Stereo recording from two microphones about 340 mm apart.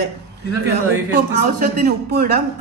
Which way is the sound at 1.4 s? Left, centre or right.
Right.